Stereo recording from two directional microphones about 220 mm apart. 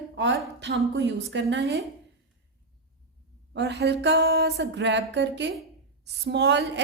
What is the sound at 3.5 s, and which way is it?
A woman's voice, 50° right (ahead or behind).